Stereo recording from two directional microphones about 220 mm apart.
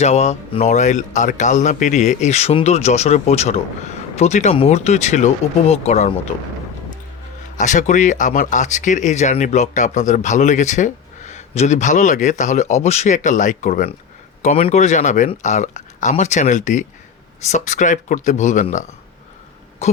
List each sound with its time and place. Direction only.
0.0 s speech: 30° left (ahead or behind)
7.5 s speech: 35° left (ahead or behind)